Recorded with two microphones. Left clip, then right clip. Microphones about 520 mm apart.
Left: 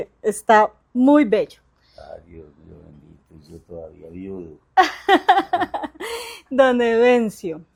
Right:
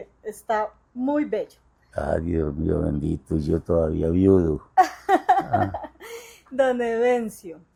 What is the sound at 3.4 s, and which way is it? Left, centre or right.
Speech, right.